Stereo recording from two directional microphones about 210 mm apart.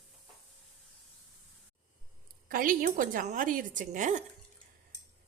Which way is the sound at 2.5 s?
40° right (ahead or behind).